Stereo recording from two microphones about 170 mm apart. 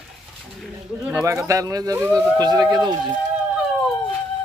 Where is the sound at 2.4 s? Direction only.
25° right (ahead or behind).